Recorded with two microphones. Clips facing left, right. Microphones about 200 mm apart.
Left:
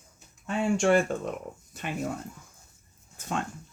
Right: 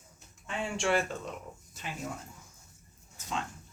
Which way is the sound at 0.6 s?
45° left (ahead or behind).